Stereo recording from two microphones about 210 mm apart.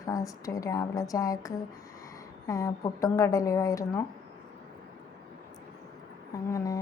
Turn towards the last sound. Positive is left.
turn(degrees=15)  # may be behind; listen again after turning